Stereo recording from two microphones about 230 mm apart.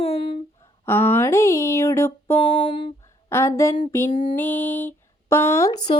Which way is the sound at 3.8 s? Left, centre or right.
Centre.